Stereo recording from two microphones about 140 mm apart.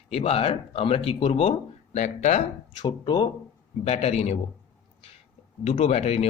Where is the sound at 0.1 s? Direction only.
45° left (ahead or behind).